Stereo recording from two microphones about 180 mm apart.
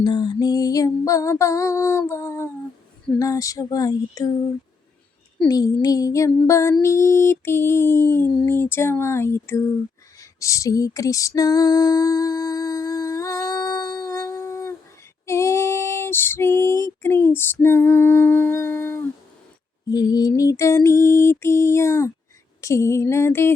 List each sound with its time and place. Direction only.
0.0 s music: 25° left (ahead or behind)
5.5 s music: 20° left (ahead or behind)
10.2 s female singing: 20° left (ahead or behind)
19.9 s music: 20° left (ahead or behind)